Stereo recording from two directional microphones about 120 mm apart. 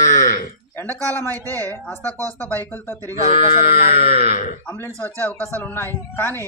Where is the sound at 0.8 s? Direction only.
15° left (ahead or behind).